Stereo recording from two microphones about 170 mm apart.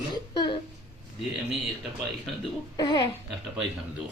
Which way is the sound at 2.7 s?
25° left (ahead or behind).